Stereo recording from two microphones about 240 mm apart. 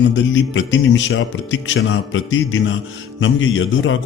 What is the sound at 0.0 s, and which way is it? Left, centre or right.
Speech, left.